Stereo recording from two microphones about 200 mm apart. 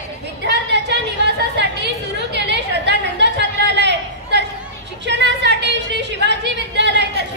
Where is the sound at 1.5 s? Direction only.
60° right (ahead or behind).